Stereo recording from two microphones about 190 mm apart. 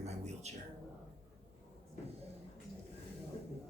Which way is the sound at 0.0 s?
35° right (ahead or behind).